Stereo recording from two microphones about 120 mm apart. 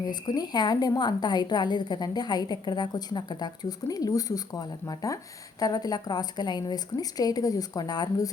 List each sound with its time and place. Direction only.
0.1 s a woman's voice: 35° left (ahead or behind)